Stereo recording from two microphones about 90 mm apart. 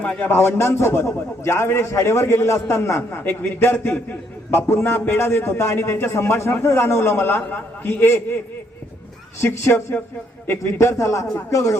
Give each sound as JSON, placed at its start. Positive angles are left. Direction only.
{"t": 0.0, "sound": "a man's voice", "side_deg": 15}
{"t": 0.3, "sound": "a man's voice", "side_deg": 25}
{"t": 9.7, "sound": "a man's voice", "side_deg": 25}